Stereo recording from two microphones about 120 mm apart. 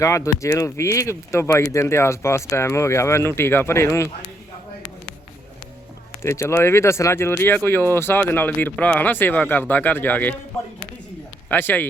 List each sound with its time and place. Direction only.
0.0 s speech: 25° left (ahead or behind)
6.2 s speech: 20° left (ahead or behind)
11.4 s speech: 15° left (ahead or behind)